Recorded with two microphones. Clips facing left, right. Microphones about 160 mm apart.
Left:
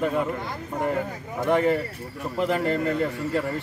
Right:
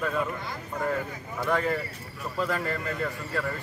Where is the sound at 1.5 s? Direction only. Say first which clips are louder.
Left 6 dB; 20° left (ahead or behind).